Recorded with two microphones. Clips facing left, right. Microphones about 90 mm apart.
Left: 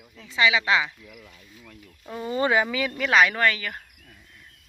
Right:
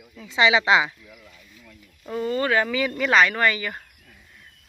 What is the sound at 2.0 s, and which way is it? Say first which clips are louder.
Speech: right 1 dB; 5° left (ahead or behind).